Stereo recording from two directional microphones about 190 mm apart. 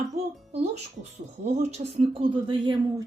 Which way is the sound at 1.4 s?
35° right (ahead or behind).